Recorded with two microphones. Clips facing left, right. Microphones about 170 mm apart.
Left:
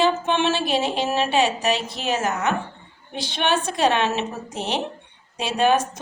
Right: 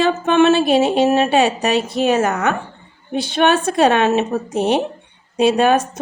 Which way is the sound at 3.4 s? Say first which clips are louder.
Right 6 dB; 50° right (ahead or behind).